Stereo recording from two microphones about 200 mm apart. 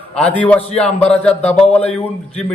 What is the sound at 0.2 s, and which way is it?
A man's voice, 5° left (ahead or behind).